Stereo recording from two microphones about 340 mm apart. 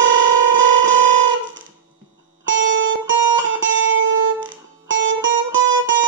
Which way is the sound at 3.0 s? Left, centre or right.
Right.